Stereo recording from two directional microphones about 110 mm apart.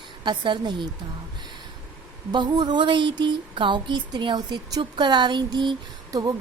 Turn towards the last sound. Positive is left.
turn(degrees=-35)  # may be behind; listen again after turning